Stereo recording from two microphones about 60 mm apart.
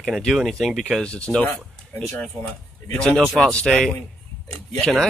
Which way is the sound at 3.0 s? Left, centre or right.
Centre.